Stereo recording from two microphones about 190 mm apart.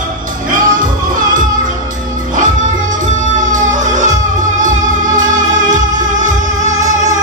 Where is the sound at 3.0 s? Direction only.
40° right (ahead or behind).